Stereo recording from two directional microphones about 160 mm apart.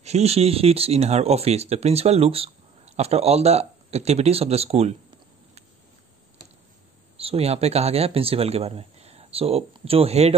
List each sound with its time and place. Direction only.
0.0 s speech: 40° right (ahead or behind)
7.2 s speech: 40° right (ahead or behind)